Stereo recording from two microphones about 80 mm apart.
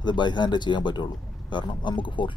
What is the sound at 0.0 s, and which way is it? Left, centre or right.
Speech, left.